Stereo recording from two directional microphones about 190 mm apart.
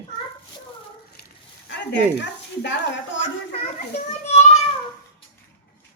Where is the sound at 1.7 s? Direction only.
65° left (ahead or behind).